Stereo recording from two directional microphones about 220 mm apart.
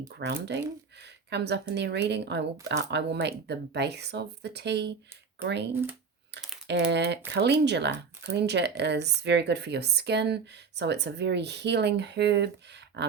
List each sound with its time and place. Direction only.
0.1 s speech: 50° right (ahead or behind)